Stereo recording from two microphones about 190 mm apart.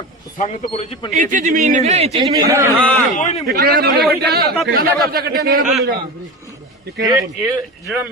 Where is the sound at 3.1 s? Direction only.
40° left (ahead or behind).